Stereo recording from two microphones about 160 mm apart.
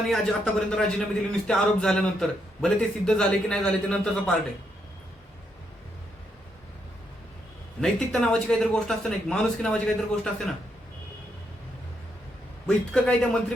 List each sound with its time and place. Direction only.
0.1 s speech: 5° left (ahead or behind)
7.8 s speech: 5° left (ahead or behind)
12.6 s speech: 5° left (ahead or behind)